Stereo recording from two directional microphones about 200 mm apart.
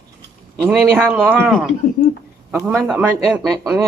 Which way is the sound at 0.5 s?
Centre (ahead or behind).